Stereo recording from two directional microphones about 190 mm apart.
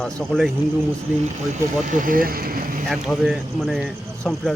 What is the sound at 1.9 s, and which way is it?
Speech, 45° right (ahead or behind).